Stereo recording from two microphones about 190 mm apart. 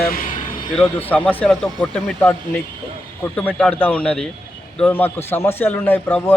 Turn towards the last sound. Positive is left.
turn(degrees=10)  # may be behind; listen again after turning